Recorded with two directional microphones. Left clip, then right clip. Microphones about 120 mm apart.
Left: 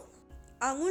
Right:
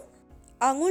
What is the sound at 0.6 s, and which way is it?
Speech, 50° right (ahead or behind).